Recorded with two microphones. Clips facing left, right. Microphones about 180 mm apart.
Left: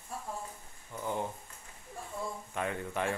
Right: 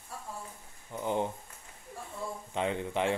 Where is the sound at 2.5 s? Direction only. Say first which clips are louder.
Right 4 dB; 20° right (ahead or behind).